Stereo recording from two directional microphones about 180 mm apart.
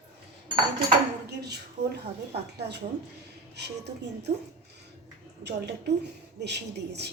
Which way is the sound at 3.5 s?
70° right (ahead or behind).